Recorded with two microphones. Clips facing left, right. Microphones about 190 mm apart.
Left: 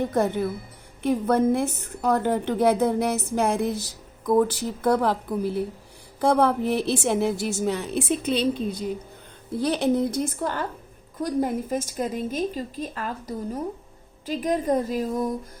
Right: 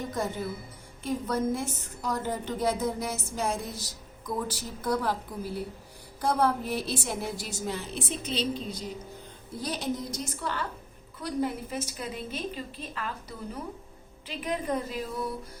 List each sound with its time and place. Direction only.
0.0 s a woman's voice: 65° left (ahead or behind); by 15.4 s 45° left (ahead or behind)